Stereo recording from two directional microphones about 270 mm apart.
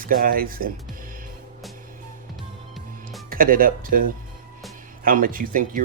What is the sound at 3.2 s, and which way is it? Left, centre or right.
Speech, right.